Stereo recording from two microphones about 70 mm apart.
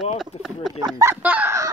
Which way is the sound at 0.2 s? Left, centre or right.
Centre.